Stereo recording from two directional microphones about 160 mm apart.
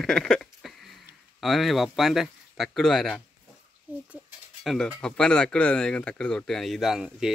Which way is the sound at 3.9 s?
10° right (ahead or behind).